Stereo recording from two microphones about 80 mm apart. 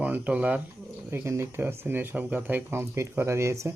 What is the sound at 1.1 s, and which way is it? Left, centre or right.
Speech, right.